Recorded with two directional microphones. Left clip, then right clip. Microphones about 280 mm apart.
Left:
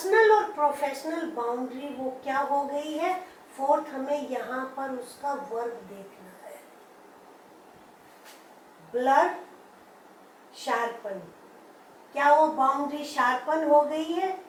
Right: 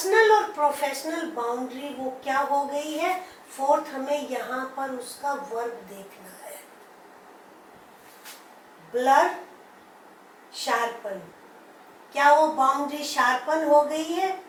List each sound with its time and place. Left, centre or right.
0.0 s a woman's voice: centre
1.4 s a sound: centre
2.2 s a woman's voice: centre
9.0 s a woman's voice: centre
10.7 s a woman's voice: centre